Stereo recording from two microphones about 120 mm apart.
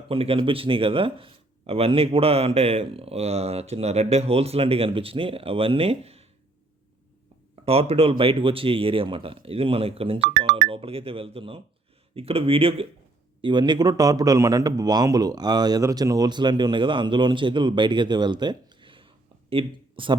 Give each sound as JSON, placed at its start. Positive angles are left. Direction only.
{"t": 0.1, "sound": "speech", "side_deg": -50}
{"t": 7.6, "sound": "speech", "side_deg": -55}
{"t": 13.4, "sound": "a man's voice", "side_deg": -40}